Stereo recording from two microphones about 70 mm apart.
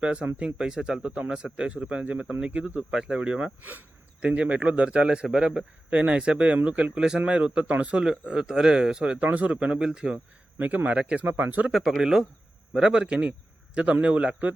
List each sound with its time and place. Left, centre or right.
0.0 s speech: centre
3.6 s speech: right
10.6 s speech: right
11.7 s speech: centre